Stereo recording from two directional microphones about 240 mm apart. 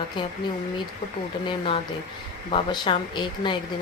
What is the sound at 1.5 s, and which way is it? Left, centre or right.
Speech, left.